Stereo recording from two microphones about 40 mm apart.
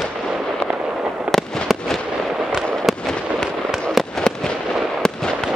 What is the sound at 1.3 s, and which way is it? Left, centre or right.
Fireworks, right.